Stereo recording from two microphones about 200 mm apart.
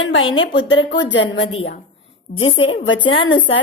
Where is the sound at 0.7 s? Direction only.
65° left (ahead or behind).